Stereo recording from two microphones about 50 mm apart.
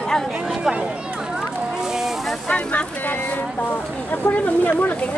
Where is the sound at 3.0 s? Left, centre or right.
Left.